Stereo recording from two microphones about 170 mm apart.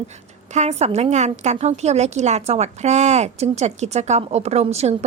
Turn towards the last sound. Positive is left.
turn(degrees=-40)  # may be behind; listen again after turning